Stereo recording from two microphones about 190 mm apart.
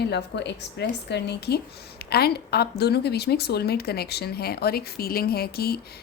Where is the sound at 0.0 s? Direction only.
65° left (ahead or behind).